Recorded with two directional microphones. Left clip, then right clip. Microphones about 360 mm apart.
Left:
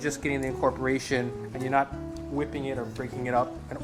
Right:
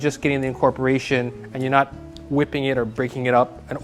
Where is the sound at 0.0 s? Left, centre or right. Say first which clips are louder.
Right 7 dB; right.